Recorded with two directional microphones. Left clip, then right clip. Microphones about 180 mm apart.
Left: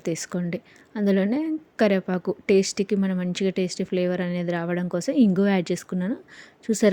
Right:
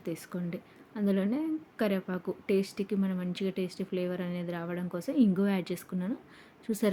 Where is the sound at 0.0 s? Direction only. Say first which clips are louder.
Left 9 dB; 35° left (ahead or behind).